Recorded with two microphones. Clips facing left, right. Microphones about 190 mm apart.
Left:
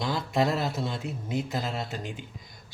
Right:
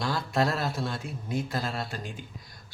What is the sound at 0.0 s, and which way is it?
Speech, 20° left (ahead or behind).